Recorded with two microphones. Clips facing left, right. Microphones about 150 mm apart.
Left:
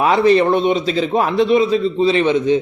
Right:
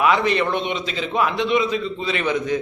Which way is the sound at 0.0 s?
35° left (ahead or behind).